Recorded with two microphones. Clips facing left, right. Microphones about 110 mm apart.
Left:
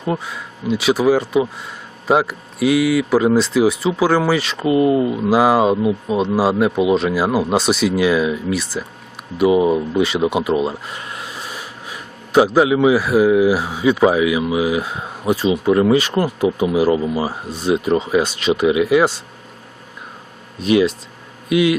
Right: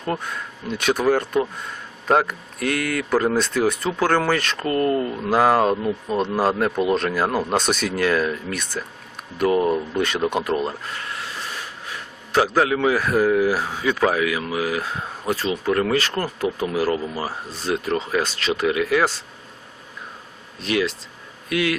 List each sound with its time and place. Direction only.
0.0 s speech: 5° left (ahead or behind)
20.7 s speech: 15° left (ahead or behind)